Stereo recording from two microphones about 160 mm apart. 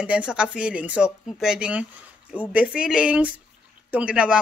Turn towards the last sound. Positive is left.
turn(degrees=-5)  # may be behind; listen again after turning